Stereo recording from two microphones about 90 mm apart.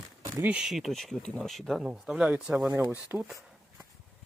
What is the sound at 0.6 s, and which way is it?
Speech, centre (ahead or behind).